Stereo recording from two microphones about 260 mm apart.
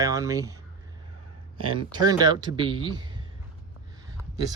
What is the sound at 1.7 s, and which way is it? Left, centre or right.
Speech, centre.